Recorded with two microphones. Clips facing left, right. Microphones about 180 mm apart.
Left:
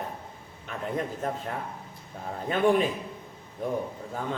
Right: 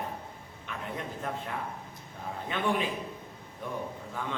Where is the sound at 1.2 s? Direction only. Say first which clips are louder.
Left 2 dB; 40° left (ahead or behind).